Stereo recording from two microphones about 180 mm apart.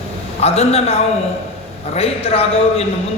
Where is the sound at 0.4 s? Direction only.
35° left (ahead or behind).